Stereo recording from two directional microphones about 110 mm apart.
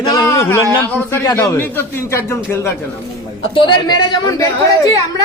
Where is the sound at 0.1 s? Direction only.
35° left (ahead or behind).